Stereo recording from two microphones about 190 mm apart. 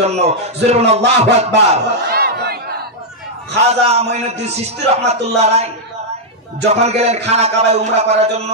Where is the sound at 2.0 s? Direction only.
55° right (ahead or behind).